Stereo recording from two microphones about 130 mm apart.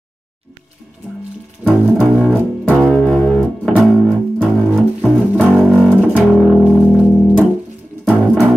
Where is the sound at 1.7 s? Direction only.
Centre (ahead or behind).